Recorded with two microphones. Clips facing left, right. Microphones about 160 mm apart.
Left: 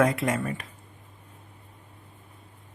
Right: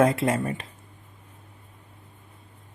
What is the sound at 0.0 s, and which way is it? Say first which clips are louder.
Speech: right 2 dB; 30° right (ahead or behind).